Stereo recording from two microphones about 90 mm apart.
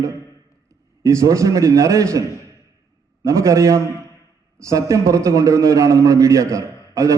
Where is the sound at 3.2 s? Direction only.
35° right (ahead or behind).